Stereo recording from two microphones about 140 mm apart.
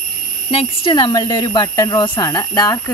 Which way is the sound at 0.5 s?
40° left (ahead or behind).